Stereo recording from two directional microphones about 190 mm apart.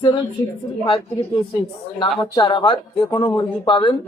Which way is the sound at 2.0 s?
25° left (ahead or behind).